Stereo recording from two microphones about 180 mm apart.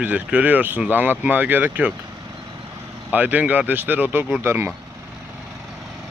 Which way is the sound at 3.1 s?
10° right (ahead or behind).